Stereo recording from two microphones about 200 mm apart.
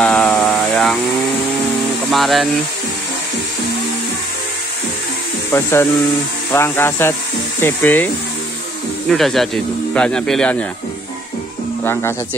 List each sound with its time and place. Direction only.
0.0 s a sound: 5° left (ahead or behind)
2.0 s speech: centre (ahead or behind)
5.5 s speech: 10° left (ahead or behind)
9.1 s speech: centre (ahead or behind)
11.8 s speech: 10° left (ahead or behind)